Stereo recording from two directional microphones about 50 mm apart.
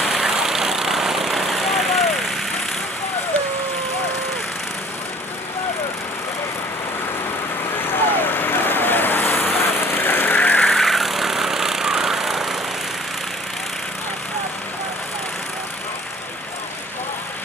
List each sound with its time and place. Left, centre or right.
0.0 s vehicle: centre
7.8 s vehicle: left
10.6 s vehicle: centre